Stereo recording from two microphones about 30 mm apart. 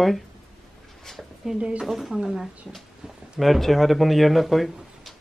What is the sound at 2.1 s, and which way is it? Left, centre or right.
Speech, right.